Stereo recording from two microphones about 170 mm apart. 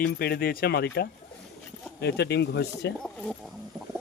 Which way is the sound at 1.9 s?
80° left.